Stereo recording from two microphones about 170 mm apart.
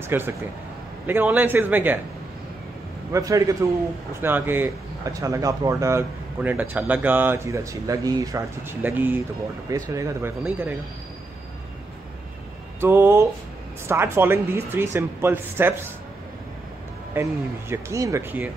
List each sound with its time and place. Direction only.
0.1 s speech: 10° right (ahead or behind)
3.1 s a man's voice: 20° right (ahead or behind)
12.8 s speech: 15° right (ahead or behind)
17.1 s speech: 15° right (ahead or behind)